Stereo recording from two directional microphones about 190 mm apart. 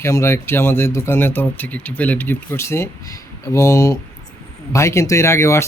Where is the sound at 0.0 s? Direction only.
15° left (ahead or behind).